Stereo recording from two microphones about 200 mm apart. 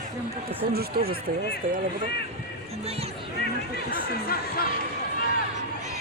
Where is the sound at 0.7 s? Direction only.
50° right (ahead or behind).